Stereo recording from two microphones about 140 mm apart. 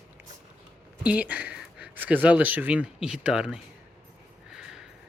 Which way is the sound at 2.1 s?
10° right (ahead or behind).